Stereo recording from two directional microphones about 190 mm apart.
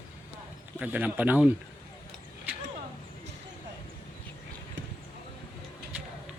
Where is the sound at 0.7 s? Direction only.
10° right (ahead or behind).